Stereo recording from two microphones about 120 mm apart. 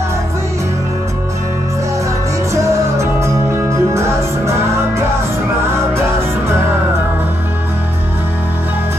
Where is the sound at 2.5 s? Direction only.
25° right (ahead or behind).